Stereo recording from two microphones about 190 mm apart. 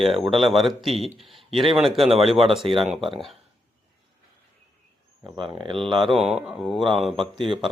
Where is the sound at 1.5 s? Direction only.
25° right (ahead or behind).